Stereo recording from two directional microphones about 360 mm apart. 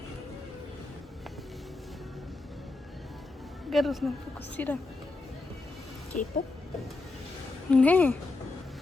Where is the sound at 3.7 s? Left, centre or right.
Centre.